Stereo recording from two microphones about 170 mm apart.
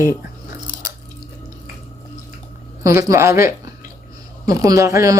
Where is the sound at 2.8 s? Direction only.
20° right (ahead or behind).